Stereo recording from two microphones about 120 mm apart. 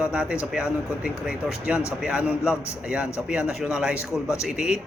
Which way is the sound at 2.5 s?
20° left (ahead or behind).